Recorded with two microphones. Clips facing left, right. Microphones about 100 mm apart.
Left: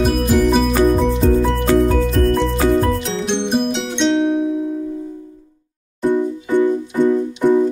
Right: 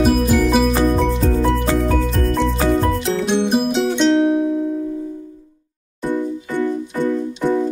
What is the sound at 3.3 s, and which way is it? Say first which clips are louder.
Music: right 1 dB; 5° right (ahead or behind).